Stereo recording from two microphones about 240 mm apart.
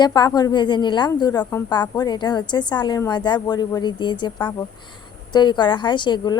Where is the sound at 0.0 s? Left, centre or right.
Centre.